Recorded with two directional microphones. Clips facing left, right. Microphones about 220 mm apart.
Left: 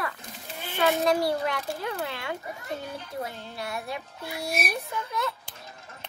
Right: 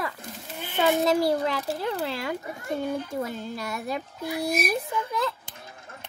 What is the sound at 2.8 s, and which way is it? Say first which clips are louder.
Speech: right 6 dB; 50° right (ahead or behind).